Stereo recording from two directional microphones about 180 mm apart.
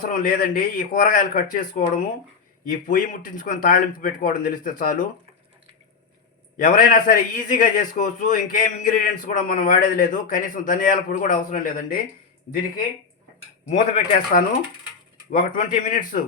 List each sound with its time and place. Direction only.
0.1 s a man's voice: 50° left (ahead or behind)
6.6 s a man's voice: 50° left (ahead or behind)
13.7 s a man's voice: 50° left (ahead or behind)